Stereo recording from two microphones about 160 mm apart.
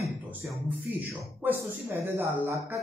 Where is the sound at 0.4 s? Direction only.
10° right (ahead or behind).